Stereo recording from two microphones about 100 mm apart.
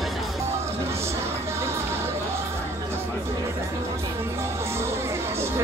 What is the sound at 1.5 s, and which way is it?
Music, 25° right (ahead or behind).